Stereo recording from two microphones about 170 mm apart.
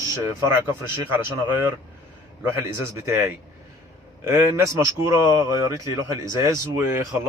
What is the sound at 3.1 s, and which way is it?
A man's voice, 15° right (ahead or behind).